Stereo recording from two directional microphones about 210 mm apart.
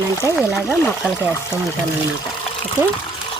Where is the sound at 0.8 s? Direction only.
5° left (ahead or behind).